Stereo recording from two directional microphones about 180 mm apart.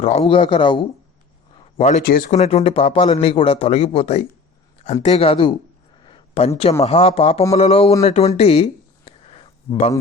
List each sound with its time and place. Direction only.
0.0 s a man's voice: 35° left (ahead or behind)
1.8 s speech: 45° left (ahead or behind)
2.3 s speech: 35° left (ahead or behind)
6.1 s a sound: 30° left (ahead or behind)
6.8 s speech: 35° left (ahead or behind)
8.4 s a sound: 35° left (ahead or behind)